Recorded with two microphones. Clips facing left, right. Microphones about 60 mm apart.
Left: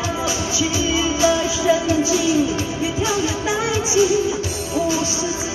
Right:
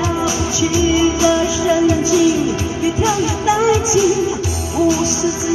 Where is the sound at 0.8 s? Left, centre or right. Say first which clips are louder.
Right 6 dB; right.